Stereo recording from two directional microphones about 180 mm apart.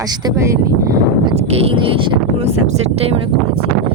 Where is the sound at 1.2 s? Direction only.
35° right (ahead or behind).